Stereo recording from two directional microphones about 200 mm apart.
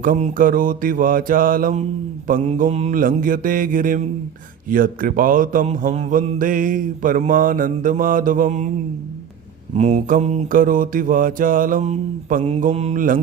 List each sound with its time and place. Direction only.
0.0 s mantra: 45° right (ahead or behind)
9.7 s mantra: 35° right (ahead or behind)